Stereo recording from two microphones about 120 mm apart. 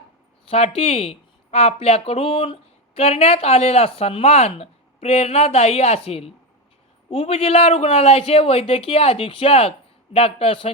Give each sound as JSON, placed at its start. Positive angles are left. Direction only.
{"t": 0.4, "sound": "speech", "side_deg": 55}